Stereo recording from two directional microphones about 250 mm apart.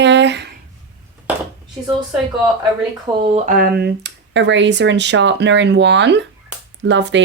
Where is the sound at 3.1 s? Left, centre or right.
Centre.